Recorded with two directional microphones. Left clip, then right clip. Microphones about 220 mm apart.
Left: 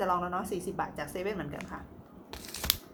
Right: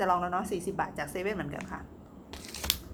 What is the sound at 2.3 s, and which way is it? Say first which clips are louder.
Scissors: even; 40° left (ahead or behind).